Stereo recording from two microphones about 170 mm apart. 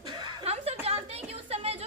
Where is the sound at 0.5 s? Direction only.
35° right (ahead or behind).